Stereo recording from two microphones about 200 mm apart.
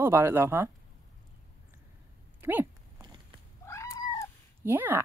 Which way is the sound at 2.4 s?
10° right (ahead or behind).